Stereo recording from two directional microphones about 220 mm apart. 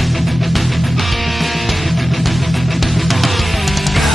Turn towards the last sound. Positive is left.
turn(degrees=0)  # may be behind; listen again after turning